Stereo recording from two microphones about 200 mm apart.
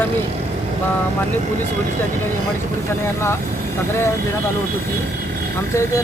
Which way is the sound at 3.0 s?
15° left (ahead or behind).